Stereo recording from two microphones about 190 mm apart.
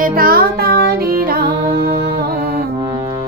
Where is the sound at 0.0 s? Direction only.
50° right (ahead or behind).